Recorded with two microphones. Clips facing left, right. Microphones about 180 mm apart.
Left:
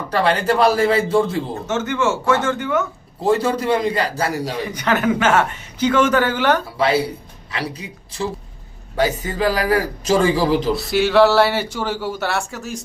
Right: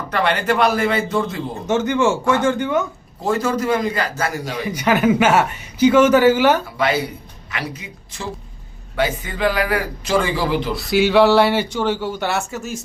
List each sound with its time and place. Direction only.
0.1 s a man's voice: 30° left (ahead or behind)
1.6 s speech: 15° right (ahead or behind)
3.2 s a man's voice: 30° left (ahead or behind)
4.7 s speech: 10° right (ahead or behind)
6.7 s a man's voice: 30° left (ahead or behind)
10.8 s speech: centre (ahead or behind)